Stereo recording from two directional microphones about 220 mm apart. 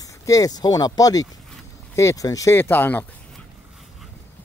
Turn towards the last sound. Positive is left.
turn(degrees=10)  # may be behind; listen again after turning